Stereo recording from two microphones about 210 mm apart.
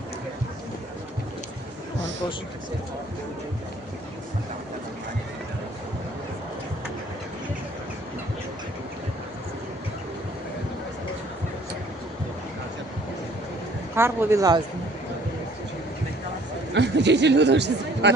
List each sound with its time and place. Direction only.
13.9 s a man's voice: 10° right (ahead or behind)
16.7 s speech: 55° right (ahead or behind)